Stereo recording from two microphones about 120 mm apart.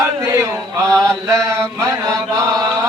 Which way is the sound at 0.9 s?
25° right (ahead or behind).